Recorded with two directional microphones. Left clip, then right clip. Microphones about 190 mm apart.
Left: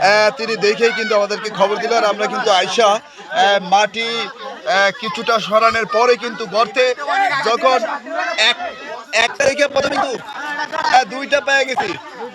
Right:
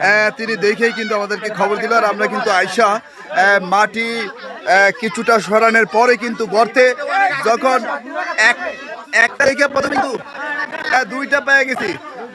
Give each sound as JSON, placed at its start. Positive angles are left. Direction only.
{"t": 0.0, "sound": "a man's voice", "side_deg": -15}